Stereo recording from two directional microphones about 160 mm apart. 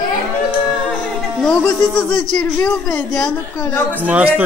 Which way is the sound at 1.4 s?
5° left (ahead or behind).